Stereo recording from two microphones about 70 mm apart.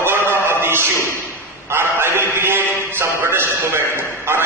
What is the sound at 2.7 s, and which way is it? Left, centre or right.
Music, right.